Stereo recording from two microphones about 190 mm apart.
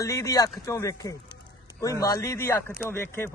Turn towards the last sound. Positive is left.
turn(degrees=10)  # may be behind; listen again after turning